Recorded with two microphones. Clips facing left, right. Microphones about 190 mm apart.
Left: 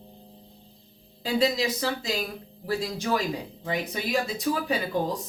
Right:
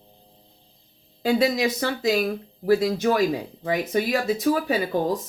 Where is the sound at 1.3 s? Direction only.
60° right (ahead or behind).